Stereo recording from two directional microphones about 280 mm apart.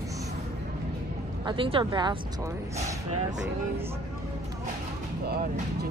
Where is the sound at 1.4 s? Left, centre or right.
Centre.